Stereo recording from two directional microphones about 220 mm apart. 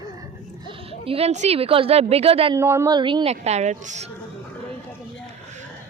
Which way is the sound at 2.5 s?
10° right (ahead or behind).